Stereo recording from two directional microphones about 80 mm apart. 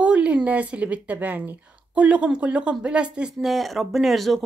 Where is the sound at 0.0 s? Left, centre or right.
Centre.